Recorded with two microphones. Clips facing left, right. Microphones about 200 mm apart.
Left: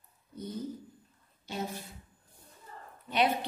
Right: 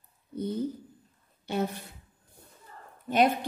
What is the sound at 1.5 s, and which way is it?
Speech, 60° right (ahead or behind).